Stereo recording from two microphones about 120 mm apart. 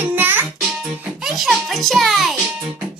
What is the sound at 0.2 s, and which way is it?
Music, 15° right (ahead or behind).